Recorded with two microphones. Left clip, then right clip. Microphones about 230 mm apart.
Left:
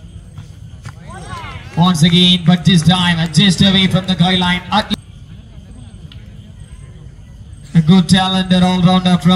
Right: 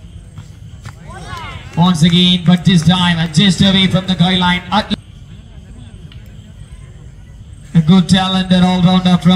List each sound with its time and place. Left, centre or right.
0.8 s a sound: centre
1.8 s speech: centre
7.7 s speech: centre